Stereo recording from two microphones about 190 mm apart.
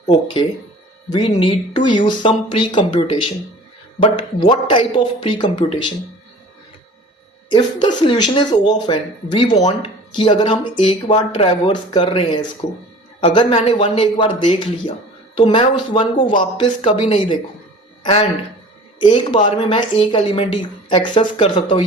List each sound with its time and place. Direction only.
1.1 s speech: 25° left (ahead or behind)
4.0 s speech: 25° left (ahead or behind)
7.5 s speech: 25° left (ahead or behind)